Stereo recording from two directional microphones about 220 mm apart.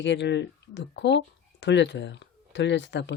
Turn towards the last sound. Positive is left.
turn(degrees=55)  # may be behind; listen again after turning